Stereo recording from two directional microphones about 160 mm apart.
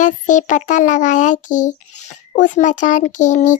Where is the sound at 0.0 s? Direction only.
50° left (ahead or behind).